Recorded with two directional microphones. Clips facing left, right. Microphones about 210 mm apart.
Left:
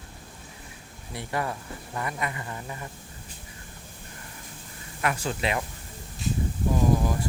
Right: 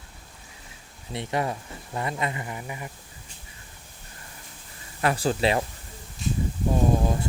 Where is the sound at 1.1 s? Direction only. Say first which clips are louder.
Right 3 dB; 20° right (ahead or behind).